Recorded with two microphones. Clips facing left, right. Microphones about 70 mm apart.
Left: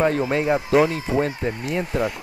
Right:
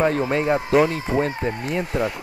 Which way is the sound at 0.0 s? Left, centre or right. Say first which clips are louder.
Even; centre.